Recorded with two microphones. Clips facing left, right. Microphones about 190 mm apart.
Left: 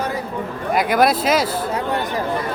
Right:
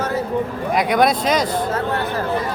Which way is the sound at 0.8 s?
Centre (ahead or behind).